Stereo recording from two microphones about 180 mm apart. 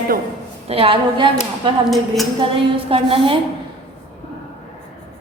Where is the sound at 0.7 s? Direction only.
30° right (ahead or behind).